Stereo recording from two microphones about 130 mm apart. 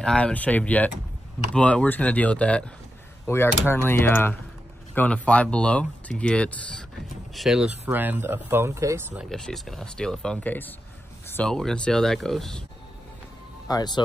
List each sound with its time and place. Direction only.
0.0 s speech: 5° left (ahead or behind)
7.3 s speech: centre (ahead or behind)
7.8 s speech: 15° right (ahead or behind)
9.3 s speech: 5° left (ahead or behind)
11.2 s a sound: 15° left (ahead or behind)
11.5 s speech: 5° left (ahead or behind)
13.7 s speech: 30° left (ahead or behind)